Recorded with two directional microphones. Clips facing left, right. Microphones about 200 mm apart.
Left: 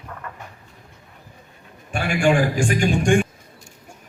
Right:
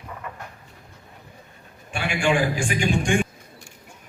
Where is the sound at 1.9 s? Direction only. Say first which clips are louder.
Left 4 dB; 45° left (ahead or behind).